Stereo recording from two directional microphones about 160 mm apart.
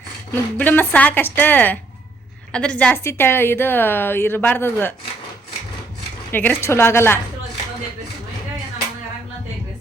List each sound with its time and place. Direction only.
0.5 s a woman's voice: 10° left (ahead or behind)
6.3 s a woman's voice: 10° left (ahead or behind)